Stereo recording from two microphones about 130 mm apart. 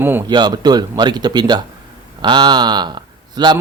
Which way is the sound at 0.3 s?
35° right (ahead or behind).